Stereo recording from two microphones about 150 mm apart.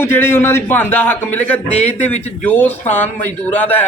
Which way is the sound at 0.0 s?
15° left (ahead or behind).